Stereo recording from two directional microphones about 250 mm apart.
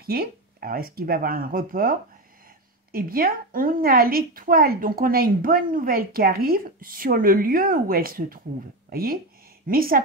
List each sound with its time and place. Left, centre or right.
0.0 s a woman's voice: right